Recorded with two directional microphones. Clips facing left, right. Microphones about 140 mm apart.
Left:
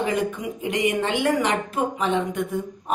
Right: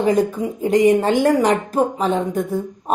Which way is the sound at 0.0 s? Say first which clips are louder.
Right 7 dB; 40° right (ahead or behind).